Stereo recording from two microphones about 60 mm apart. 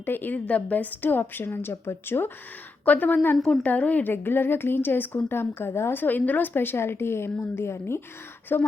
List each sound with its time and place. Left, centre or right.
0.0 s a woman's voice: left
1.7 s a woman's voice: left
3.3 s a woman's voice: centre
3.6 s a woman's voice: left
4.1 s a woman's voice: left
6.0 s a woman's voice: left